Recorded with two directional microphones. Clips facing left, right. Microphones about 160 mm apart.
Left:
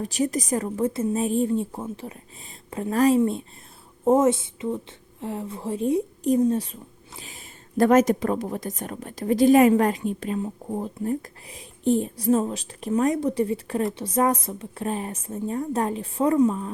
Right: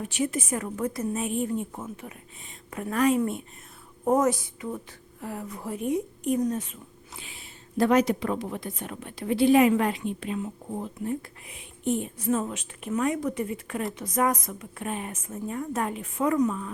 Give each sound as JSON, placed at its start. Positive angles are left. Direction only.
{"t": 0.0, "sound": "a woman's voice", "side_deg": 40}